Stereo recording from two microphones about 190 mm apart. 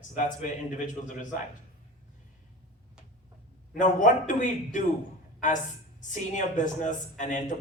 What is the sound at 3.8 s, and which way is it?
Speech, 40° left (ahead or behind).